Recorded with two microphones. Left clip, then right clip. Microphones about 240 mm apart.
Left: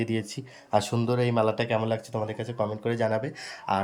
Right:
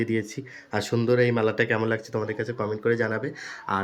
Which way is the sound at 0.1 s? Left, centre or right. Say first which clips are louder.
Right 3 dB; centre.